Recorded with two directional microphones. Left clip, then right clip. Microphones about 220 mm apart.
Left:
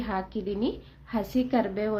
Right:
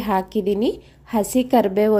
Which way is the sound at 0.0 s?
35° right (ahead or behind).